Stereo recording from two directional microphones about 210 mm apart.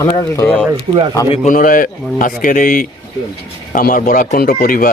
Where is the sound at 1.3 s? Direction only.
40° left (ahead or behind).